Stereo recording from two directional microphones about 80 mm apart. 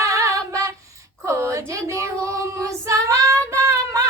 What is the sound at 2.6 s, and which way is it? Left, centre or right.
Child singing, right.